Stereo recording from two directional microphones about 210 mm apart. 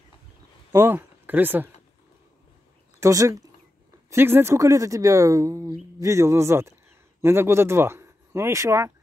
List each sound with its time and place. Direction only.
0.7 s speech: 10° right (ahead or behind)
3.0 s speech: 15° right (ahead or behind)